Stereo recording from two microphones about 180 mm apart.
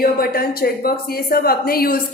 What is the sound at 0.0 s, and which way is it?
A woman's voice, 55° left (ahead or behind).